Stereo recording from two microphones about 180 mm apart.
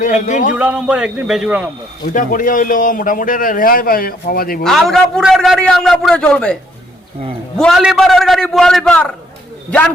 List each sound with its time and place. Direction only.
0.0 s a man's voice: 45° left (ahead or behind)
0.5 s a man's voice: 5° right (ahead or behind)
2.1 s a man's voice: 50° left (ahead or behind)
4.6 s a man's voice: centre (ahead or behind)
7.6 s a man's voice: centre (ahead or behind)